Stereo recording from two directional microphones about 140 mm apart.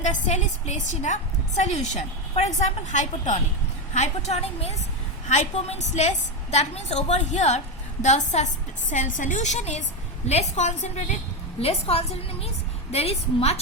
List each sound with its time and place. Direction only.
0.0 s a woman's voice: 55° left (ahead or behind)